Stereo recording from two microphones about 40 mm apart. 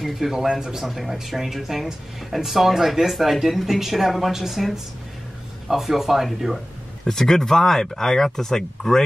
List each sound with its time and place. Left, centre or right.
0.0 s speech: centre
0.5 s speech: centre
0.8 s speech: centre
7.1 s speech: centre